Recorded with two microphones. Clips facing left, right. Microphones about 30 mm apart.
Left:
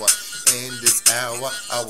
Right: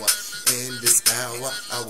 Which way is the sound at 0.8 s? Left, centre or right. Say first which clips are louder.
Left 2 dB; left.